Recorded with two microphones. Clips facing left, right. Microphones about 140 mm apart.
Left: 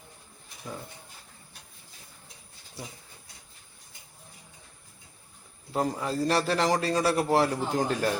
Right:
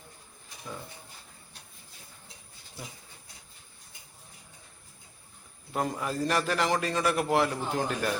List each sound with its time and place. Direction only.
2.8 s a man's voice: 35° left (ahead or behind)
5.7 s a man's voice: 30° left (ahead or behind)